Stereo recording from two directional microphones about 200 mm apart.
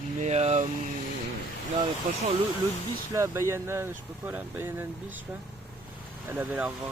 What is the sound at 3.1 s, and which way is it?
Speech, 15° right (ahead or behind).